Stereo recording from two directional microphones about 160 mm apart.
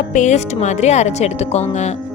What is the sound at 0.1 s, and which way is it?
Speech, 50° left (ahead or behind).